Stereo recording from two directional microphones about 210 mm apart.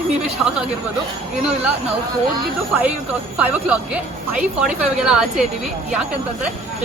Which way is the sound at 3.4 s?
5° right (ahead or behind).